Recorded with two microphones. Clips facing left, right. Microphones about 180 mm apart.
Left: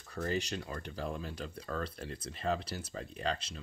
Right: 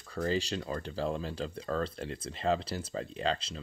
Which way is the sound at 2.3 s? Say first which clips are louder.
Right 4 dB; 90° right.